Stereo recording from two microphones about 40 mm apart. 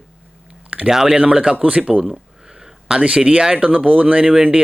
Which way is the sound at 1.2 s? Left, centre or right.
Right.